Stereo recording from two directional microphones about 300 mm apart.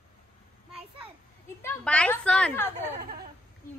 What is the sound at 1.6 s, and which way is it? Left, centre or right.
A child's voice, centre.